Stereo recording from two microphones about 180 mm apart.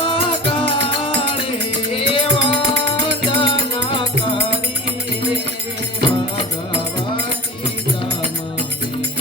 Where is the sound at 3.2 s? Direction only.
25° left (ahead or behind).